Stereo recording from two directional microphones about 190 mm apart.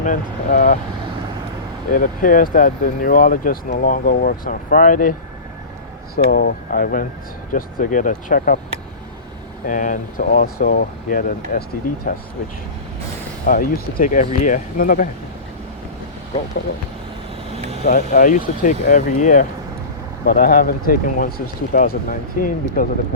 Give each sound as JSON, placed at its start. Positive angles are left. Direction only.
{"t": 0.0, "sound": "speech", "side_deg": 40}
{"t": 1.9, "sound": "speech", "side_deg": 45}
{"t": 6.1, "sound": "speech", "side_deg": 50}
{"t": 9.6, "sound": "speech", "side_deg": 45}
{"t": 13.4, "sound": "speech", "side_deg": 45}
{"t": 17.8, "sound": "speech", "side_deg": 45}